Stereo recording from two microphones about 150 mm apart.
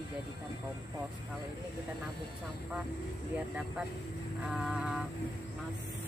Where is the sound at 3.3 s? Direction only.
5° right (ahead or behind).